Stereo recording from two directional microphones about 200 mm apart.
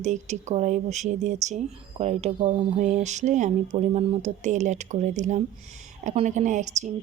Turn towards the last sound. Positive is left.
turn(degrees=-35)  # may be behind; listen again after turning